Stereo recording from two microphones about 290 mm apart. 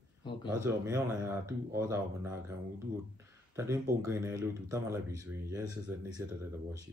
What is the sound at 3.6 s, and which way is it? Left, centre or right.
Speech, centre.